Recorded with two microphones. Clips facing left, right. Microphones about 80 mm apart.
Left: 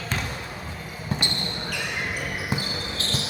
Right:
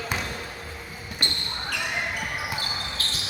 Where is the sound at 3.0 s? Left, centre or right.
Left.